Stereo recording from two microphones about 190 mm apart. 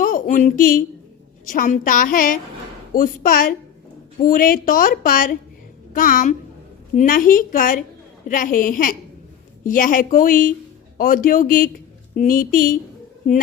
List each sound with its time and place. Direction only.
0.0 s a woman's voice: 45° left (ahead or behind)